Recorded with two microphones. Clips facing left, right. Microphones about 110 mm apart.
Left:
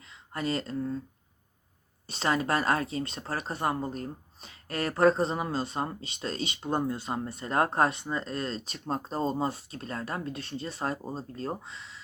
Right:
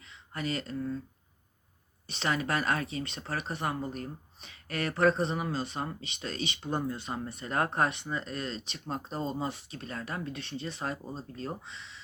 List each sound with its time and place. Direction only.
0.0 s speech: 35° left (ahead or behind)
2.0 s speech: 35° left (ahead or behind)